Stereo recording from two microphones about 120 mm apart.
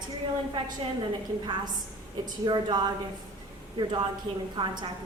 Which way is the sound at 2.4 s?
40° right (ahead or behind).